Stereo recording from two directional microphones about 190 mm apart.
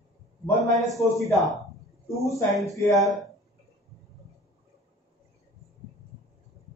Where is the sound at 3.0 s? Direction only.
Centre (ahead or behind).